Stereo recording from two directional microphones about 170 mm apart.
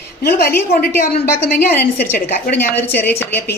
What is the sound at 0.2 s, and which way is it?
A woman's voice, 65° left (ahead or behind).